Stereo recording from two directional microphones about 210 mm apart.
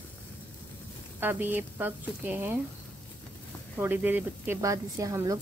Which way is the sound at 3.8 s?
10° right (ahead or behind).